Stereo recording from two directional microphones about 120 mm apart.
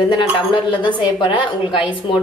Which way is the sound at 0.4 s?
45° left (ahead or behind).